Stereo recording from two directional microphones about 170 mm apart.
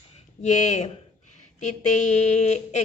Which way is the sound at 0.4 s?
40° left (ahead or behind).